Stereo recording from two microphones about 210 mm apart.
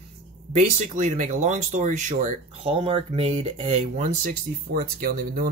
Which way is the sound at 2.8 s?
25° right (ahead or behind).